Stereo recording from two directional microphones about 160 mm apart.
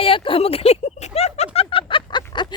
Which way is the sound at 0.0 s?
35° left (ahead or behind).